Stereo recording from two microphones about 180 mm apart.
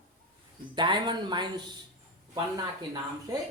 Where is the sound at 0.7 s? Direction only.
25° right (ahead or behind).